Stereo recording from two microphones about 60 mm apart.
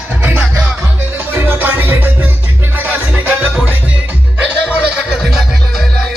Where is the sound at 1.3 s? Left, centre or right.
Right.